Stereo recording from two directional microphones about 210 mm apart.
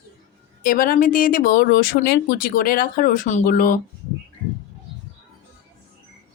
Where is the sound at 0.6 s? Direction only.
40° left (ahead or behind).